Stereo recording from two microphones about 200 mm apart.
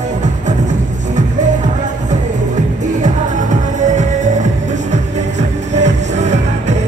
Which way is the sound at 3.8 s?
35° right (ahead or behind).